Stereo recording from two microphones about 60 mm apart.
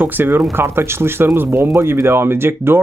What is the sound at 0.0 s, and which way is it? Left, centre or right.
Speech, right.